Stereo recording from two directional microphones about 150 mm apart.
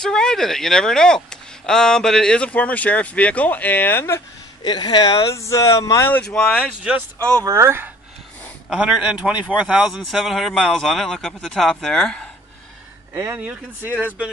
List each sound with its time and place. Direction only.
0.0 s speech: 5° left (ahead or behind)
4.6 s speech: 30° left (ahead or behind); by 6.7 s 5° left (ahead or behind)
7.3 s speech: 20° right (ahead or behind)
8.6 s speech: 5° right (ahead or behind)
13.1 s speech: 15° right (ahead or behind)